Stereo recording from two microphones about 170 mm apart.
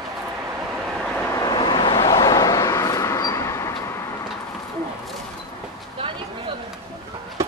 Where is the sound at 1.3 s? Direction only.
25° left (ahead or behind).